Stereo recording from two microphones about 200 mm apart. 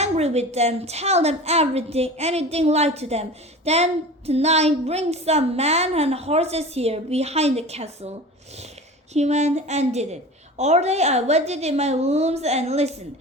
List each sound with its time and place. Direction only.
0.0 s a woman's voice: 35° right (ahead or behind)
9.1 s a woman's voice: 35° right (ahead or behind)